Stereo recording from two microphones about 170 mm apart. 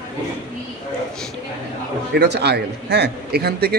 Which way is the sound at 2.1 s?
80° right.